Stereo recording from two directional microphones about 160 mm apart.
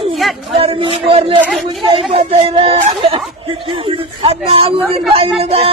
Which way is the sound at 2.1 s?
35° right (ahead or behind).